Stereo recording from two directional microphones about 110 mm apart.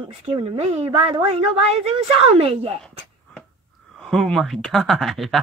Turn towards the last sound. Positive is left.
turn(degrees=0)  # may be behind; listen again after turning